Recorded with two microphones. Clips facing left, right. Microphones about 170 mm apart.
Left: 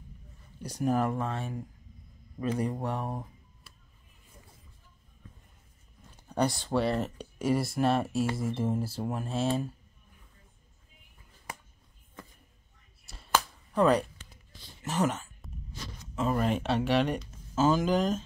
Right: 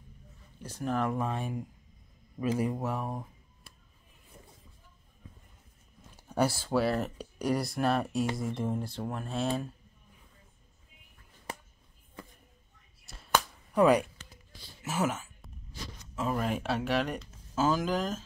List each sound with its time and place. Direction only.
0.6 s speech: 15° left (ahead or behind)
1.1 s speech: 15° right (ahead or behind)
2.6 s speech: 5° right (ahead or behind)
6.1 s speech: 5° right (ahead or behind)
13.0 s a sound: centre (ahead or behind)
16.2 s speech: 5° right (ahead or behind)